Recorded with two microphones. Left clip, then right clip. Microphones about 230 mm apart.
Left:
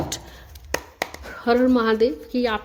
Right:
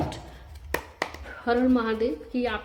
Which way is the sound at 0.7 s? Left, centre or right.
Left.